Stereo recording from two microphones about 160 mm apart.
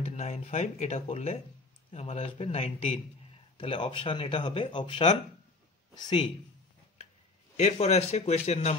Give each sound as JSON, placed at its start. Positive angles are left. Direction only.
{"t": 0.0, "sound": "speech", "side_deg": 45}
{"t": 7.5, "sound": "speech", "side_deg": 45}